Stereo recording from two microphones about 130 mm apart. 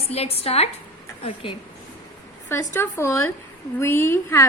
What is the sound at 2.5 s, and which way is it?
A woman's voice, 20° left (ahead or behind).